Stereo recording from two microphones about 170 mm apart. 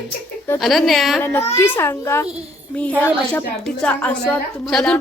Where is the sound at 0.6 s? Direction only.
Centre (ahead or behind).